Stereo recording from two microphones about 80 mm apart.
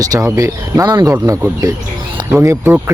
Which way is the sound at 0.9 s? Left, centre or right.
Right.